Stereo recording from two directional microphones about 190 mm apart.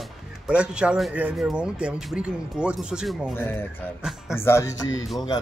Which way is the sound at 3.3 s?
10° left (ahead or behind).